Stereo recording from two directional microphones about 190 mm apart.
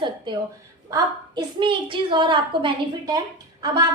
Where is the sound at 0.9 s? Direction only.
20° right (ahead or behind).